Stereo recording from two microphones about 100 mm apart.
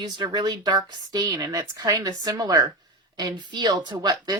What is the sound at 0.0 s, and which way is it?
A woman's voice, 45° right (ahead or behind).